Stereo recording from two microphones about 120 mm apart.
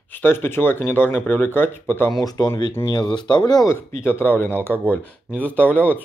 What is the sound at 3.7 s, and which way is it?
Speech, 20° left (ahead or behind).